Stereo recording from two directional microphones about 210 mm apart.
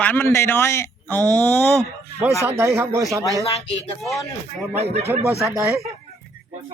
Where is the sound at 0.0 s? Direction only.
10° left (ahead or behind).